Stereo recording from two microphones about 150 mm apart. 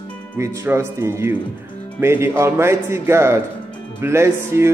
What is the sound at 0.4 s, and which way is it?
Speech, 20° right (ahead or behind).